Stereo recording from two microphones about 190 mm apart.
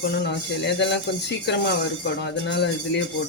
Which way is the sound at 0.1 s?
65° left (ahead or behind).